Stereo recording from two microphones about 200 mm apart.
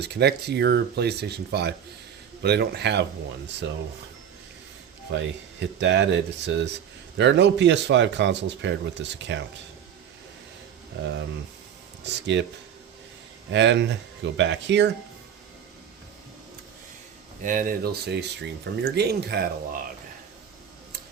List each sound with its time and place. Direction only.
0.0 s speech: 55° right (ahead or behind)
5.1 s speech: 60° right (ahead or behind)
12.0 s speech: 60° right (ahead or behind)
13.5 s speech: 65° right (ahead or behind)
17.4 s speech: 45° right (ahead or behind)